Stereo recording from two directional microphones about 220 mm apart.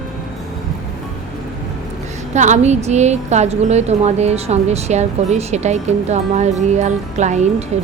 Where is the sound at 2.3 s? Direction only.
35° right (ahead or behind).